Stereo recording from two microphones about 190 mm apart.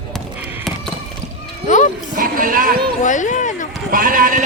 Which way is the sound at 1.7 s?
40° left (ahead or behind).